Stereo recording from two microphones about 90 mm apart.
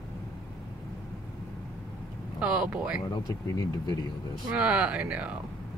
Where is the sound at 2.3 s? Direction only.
10° right (ahead or behind).